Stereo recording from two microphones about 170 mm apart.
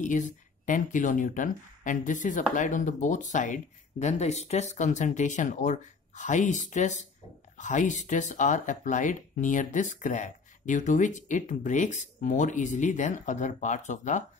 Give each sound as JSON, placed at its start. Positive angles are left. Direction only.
{"t": 0.0, "sound": "speech", "side_deg": 50}